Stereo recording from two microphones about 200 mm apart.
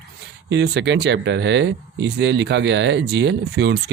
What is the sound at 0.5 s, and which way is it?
Speech, 60° right (ahead or behind).